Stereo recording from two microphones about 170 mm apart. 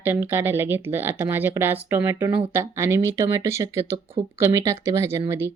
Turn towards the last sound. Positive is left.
turn(degrees=-15)  # may be behind; listen again after turning